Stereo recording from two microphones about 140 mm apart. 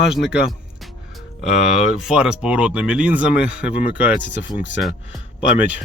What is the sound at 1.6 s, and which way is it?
Speech, 5° right (ahead or behind).